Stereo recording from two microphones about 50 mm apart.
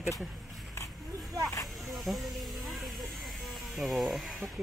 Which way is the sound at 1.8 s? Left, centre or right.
Centre.